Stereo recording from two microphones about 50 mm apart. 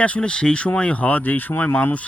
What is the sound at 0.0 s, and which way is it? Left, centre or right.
Speech, left.